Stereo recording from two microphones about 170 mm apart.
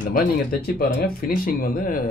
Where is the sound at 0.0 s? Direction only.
60° left (ahead or behind).